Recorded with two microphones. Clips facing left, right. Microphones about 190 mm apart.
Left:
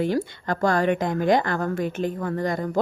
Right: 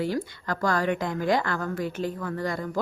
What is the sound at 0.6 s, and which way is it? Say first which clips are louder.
Speech: left 4 dB; 20° left (ahead or behind).